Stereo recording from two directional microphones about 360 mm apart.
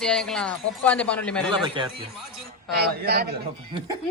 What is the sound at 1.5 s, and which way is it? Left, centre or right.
Speech, centre.